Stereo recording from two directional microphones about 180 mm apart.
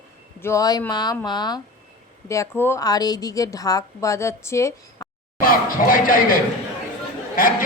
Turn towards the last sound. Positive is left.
turn(degrees=50)  # may be behind; listen again after turning